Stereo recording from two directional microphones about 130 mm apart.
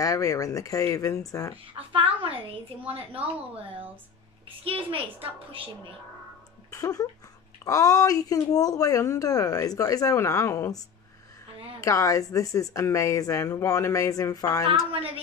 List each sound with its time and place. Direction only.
0.0 s speech: 25° left (ahead or behind)
1.7 s a woman's voice: 45° right (ahead or behind)
4.6 s a woman's voice: 45° right (ahead or behind)
6.7 s speech: 25° left (ahead or behind)
11.8 s speech: 25° left (ahead or behind)
14.9 s a woman's voice: 45° right (ahead or behind)